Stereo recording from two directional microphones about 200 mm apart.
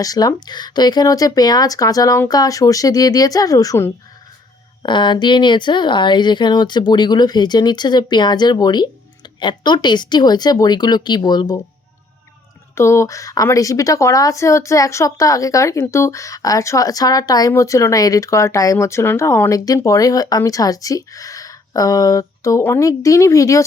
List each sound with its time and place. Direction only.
0.0 s a woman's voice: 15° left (ahead or behind)
12.7 s a woman's voice: 15° left (ahead or behind)